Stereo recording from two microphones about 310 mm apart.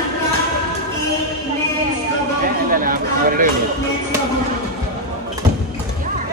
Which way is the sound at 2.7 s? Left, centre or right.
Right.